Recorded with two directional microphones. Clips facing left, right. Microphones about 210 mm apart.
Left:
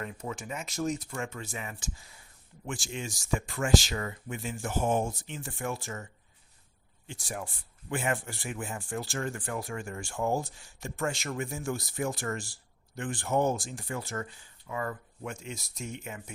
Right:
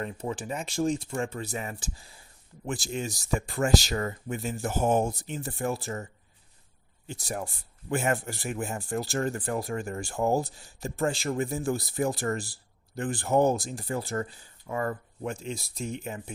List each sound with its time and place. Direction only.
0.0 s speech: 30° right (ahead or behind)
7.1 s speech: 40° right (ahead or behind)